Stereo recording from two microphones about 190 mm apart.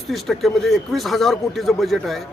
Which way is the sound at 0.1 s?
Centre (ahead or behind).